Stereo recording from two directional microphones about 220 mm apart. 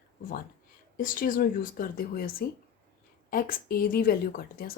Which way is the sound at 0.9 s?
40° left (ahead or behind).